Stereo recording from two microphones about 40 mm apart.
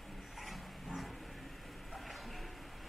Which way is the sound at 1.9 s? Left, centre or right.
Centre.